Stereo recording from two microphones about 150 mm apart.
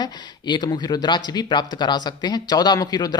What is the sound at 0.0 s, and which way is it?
A man's voice, 30° left (ahead or behind).